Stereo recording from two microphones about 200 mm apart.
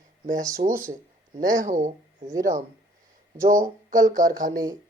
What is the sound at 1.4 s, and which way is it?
Speech, 40° right (ahead or behind).